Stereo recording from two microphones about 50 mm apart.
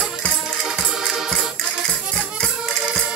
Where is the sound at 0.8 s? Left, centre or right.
Centre.